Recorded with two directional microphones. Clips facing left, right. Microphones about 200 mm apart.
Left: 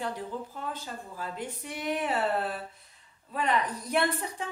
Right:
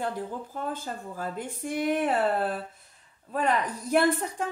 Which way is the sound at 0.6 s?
45° right (ahead or behind).